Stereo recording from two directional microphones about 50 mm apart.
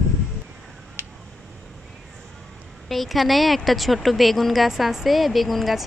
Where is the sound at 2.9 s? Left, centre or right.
Centre.